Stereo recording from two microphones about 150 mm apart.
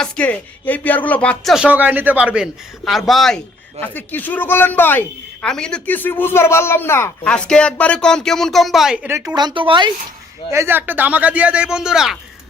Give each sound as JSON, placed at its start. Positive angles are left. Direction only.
{"t": 0.0, "sound": "a man's voice", "side_deg": 10}
{"t": 1.5, "sound": "a man's voice", "side_deg": -10}
{"t": 3.8, "sound": "a man's voice", "side_deg": 10}
{"t": 9.0, "sound": "speech", "side_deg": -20}
{"t": 10.5, "sound": "a man's voice", "side_deg": -15}